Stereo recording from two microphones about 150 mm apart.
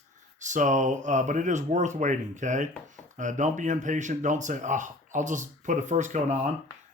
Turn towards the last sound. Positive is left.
turn(degrees=-50)  # may be behind; listen again after turning